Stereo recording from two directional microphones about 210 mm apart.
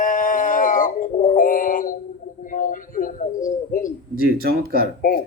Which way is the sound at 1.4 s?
40° left (ahead or behind).